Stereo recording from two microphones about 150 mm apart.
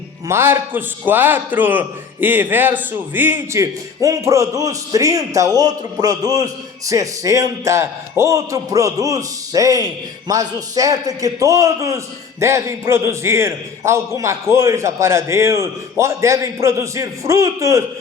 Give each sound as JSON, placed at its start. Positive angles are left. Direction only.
{"t": 0.3, "sound": "a man's voice", "side_deg": -15}